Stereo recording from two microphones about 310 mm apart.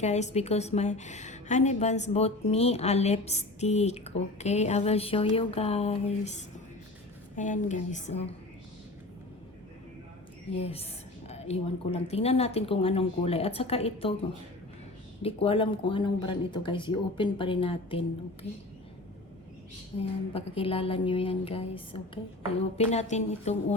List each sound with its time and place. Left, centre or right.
0.0 s a woman's voice: left
10.6 s a woman's voice: centre
15.2 s speech: centre
20.0 s a woman's voice: centre